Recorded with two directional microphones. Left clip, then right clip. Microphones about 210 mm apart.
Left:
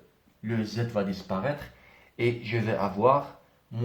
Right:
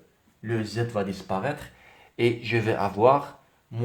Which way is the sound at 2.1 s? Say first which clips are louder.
Right 4 dB; 45° right (ahead or behind).